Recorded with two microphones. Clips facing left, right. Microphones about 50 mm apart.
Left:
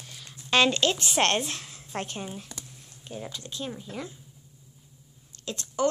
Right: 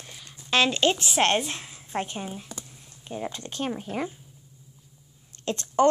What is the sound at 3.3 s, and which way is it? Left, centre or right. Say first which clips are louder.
Speech: right 5 dB; right.